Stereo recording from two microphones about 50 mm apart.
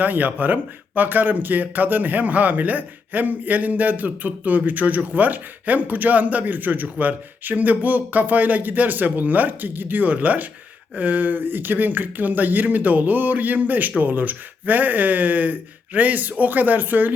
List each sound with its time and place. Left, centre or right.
0.0 s speech: right